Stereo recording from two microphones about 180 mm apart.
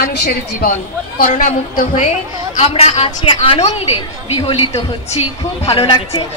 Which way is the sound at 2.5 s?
35° left (ahead or behind).